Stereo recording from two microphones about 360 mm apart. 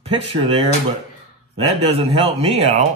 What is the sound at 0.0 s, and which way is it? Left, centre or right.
Speech, centre.